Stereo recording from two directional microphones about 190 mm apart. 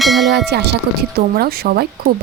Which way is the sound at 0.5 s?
60° right (ahead or behind).